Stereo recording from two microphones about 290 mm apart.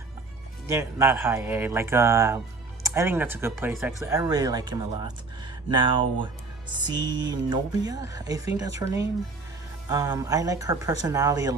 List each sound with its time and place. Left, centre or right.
0.7 s speech: centre
9.9 s speech: centre